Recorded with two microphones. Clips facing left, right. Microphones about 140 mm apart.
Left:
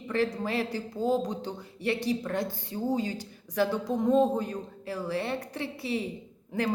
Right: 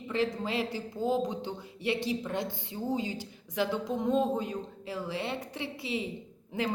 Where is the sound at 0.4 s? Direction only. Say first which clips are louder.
Left 2 dB; 15° right (ahead or behind).